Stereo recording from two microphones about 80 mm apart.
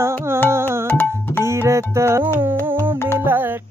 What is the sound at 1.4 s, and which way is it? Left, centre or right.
Music, right.